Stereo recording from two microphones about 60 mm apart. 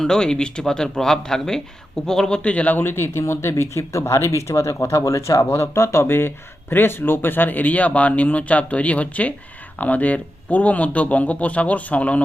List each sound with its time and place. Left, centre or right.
0.0 s speech: centre
2.7 s speech: left
5.5 s speech: left